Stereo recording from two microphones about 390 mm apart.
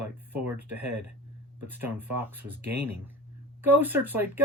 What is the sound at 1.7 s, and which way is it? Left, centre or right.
Speech, centre.